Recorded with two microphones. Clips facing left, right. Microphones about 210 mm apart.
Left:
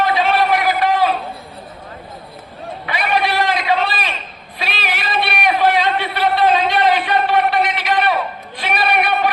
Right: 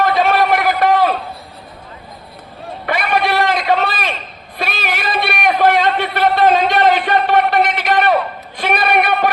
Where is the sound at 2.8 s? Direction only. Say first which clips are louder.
Right 2 dB; 50° right (ahead or behind).